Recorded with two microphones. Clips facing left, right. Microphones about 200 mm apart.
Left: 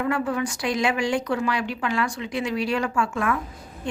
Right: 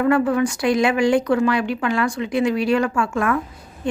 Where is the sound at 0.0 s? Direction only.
55° right (ahead or behind).